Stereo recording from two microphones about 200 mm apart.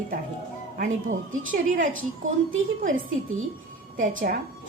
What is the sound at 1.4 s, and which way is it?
Speech, 40° right (ahead or behind).